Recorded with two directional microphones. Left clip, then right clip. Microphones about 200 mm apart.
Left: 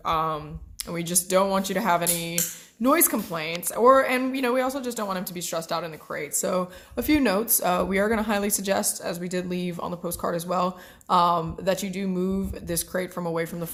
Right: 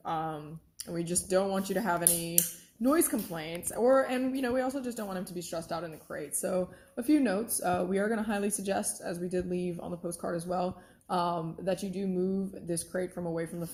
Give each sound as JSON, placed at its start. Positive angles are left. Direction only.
{"t": 0.0, "sound": "speech", "side_deg": 25}